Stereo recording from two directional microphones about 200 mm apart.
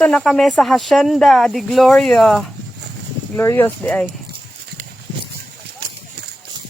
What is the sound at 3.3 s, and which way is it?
Speech, 10° left (ahead or behind).